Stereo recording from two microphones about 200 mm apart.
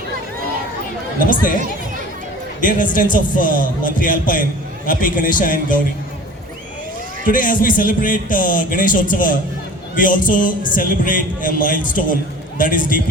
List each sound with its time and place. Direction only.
2.6 s a man's voice: 40° left (ahead or behind)
7.3 s a man's voice: 45° left (ahead or behind)